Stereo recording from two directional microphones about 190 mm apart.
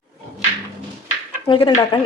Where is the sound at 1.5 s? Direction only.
25° left (ahead or behind).